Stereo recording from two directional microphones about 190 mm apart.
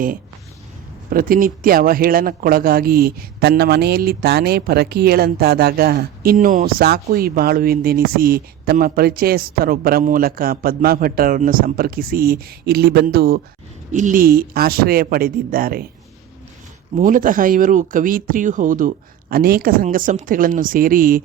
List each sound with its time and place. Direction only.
1.1 s speech: 50° right (ahead or behind)
13.9 s speech: 45° right (ahead or behind)
17.0 s speech: 45° right (ahead or behind)